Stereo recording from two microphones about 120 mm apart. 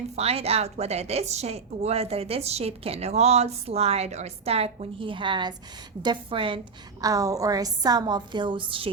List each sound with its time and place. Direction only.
0.2 s a woman's voice: 60° right (ahead or behind)
7.0 s a woman's voice: 30° right (ahead or behind); by 8.9 s 45° right (ahead or behind)